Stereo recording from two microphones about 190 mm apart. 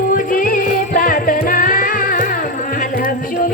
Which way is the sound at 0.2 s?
45° left (ahead or behind).